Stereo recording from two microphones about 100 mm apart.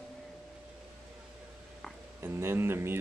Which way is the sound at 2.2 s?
25° right (ahead or behind).